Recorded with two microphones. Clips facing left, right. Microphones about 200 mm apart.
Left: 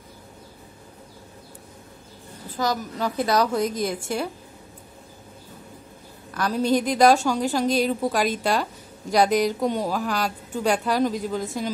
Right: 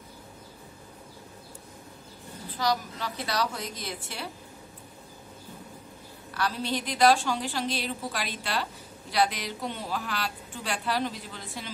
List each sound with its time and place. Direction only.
2.5 s a woman's voice: 45° left (ahead or behind)
6.3 s a woman's voice: 45° left (ahead or behind)